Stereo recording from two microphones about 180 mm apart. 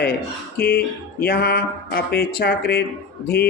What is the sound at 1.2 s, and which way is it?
Speech, 60° left (ahead or behind).